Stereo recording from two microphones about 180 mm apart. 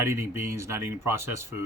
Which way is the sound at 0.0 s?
15° right (ahead or behind).